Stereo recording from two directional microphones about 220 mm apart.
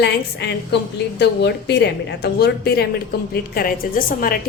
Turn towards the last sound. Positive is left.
turn(degrees=40)  # may be behind; listen again after turning